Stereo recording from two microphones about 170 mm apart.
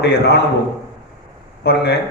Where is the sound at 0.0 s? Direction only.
75° left (ahead or behind).